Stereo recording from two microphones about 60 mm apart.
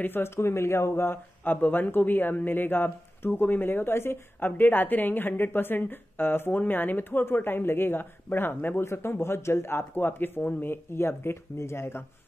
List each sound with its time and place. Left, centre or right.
0.0 s speech: left
4.5 s speech: left